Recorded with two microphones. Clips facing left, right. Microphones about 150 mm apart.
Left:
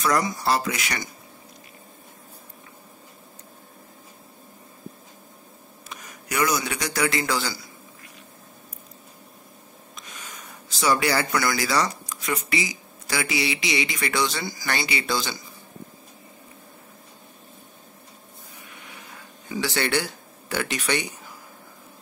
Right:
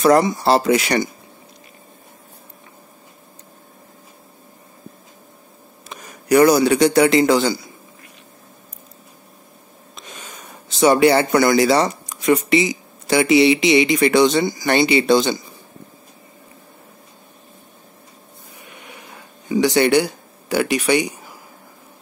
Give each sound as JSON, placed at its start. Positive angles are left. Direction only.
{"t": 0.0, "sound": "speech", "side_deg": -30}
{"t": 5.9, "sound": "a man's voice", "side_deg": -35}
{"t": 9.9, "sound": "snort", "side_deg": -25}
{"t": 10.8, "sound": "speech", "side_deg": -25}
{"t": 19.5, "sound": "speech", "side_deg": -15}